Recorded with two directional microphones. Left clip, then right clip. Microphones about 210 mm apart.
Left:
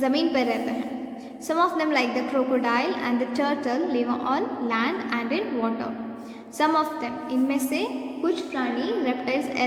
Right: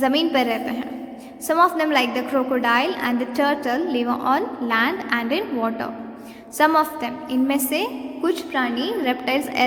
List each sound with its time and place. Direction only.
0.0 s a woman's voice: 25° right (ahead or behind)